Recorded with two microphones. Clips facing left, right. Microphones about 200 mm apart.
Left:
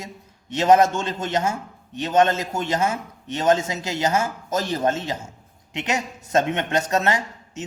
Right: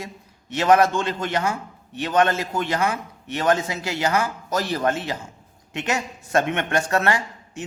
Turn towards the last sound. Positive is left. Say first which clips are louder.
# even
turn(degrees=20)  # may be behind; listen again after turning